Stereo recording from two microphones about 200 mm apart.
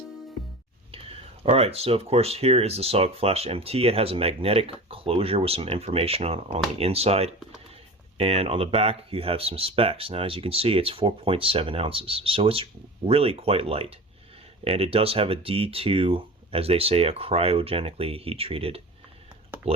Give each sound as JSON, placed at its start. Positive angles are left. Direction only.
{"t": 1.5, "sound": "speech", "side_deg": -30}